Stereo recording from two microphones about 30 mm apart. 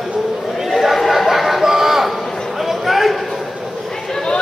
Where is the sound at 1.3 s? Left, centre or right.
Centre.